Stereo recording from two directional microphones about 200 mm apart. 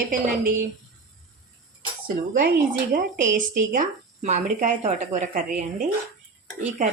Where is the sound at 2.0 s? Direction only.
45° right (ahead or behind).